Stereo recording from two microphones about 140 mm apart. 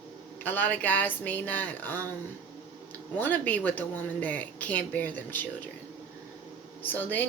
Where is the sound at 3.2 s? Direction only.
10° left (ahead or behind).